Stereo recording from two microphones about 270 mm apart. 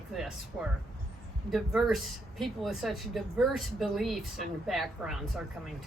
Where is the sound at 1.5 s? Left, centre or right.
Centre.